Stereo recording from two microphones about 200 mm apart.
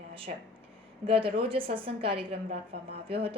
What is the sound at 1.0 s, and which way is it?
A woman's voice, 25° right (ahead or behind).